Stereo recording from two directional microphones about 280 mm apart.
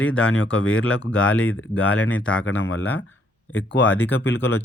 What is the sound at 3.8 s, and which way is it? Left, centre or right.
Speech, centre.